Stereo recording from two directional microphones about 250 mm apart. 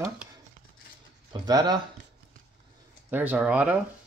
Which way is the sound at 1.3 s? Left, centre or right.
Centre.